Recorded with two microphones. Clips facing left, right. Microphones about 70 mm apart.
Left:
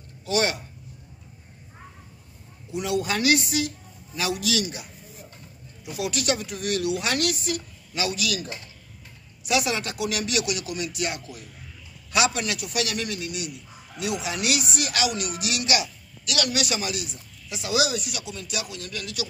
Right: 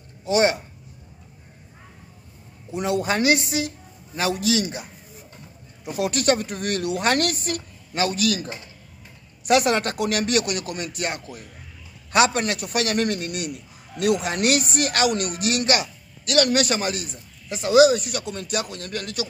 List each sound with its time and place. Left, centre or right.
0.2 s a man's voice: right
2.7 s a man's voice: right
5.9 s a man's voice: right
9.4 s a man's voice: right